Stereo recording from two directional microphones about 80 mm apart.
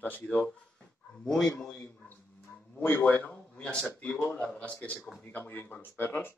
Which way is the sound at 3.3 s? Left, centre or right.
Centre.